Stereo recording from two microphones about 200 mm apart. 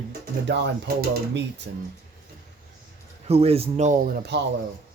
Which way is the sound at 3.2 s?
30° right (ahead or behind).